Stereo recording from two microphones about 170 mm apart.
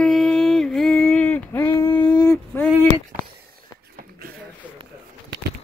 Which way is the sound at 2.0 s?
25° left (ahead or behind).